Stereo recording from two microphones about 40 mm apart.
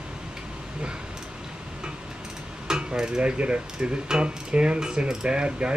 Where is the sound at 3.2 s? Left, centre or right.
Right.